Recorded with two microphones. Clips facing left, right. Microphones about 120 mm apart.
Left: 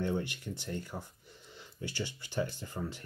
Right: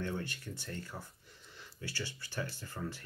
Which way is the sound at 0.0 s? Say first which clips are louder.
Left 5 dB; 15° left (ahead or behind).